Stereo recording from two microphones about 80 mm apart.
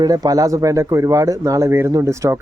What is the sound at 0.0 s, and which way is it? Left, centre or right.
Speech, right.